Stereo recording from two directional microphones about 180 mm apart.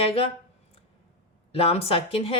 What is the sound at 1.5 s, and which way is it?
Speech, 35° left (ahead or behind).